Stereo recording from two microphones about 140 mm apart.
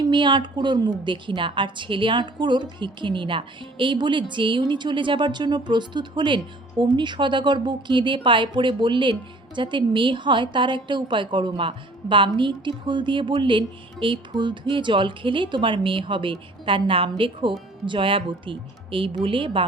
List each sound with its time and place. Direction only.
0.0 s a woman's voice: 35° right (ahead or behind)